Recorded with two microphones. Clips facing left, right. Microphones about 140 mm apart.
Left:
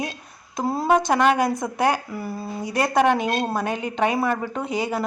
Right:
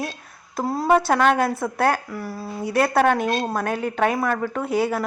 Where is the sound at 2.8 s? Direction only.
10° left (ahead or behind).